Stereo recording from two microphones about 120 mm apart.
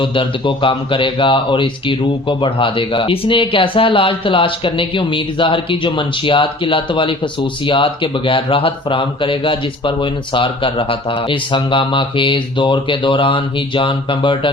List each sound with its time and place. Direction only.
0.0 s speech: 45° left (ahead or behind)